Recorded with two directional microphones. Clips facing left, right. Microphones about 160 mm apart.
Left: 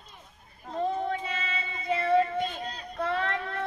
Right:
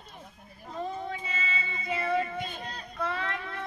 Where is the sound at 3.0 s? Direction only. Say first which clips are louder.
Left 4 dB; 55° left (ahead or behind).